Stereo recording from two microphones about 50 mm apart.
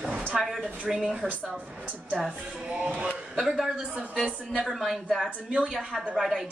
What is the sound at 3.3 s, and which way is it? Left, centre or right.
A woman's voice, centre.